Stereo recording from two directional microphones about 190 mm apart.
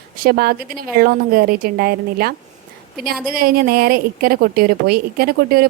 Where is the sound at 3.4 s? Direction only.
50° right (ahead or behind).